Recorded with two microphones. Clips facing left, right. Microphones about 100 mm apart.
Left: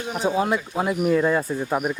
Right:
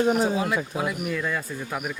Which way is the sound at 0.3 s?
35° left (ahead or behind).